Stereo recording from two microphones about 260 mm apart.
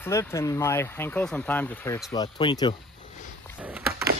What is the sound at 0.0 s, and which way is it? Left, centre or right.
Speech, centre.